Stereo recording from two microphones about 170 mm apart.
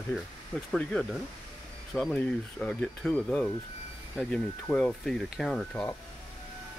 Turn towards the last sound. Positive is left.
turn(degrees=5)  # may be behind; listen again after turning